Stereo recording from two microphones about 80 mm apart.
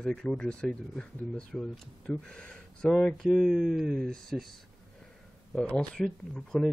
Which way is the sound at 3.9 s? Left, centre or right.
Centre.